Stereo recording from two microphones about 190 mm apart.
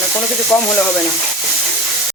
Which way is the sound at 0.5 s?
10° left (ahead or behind).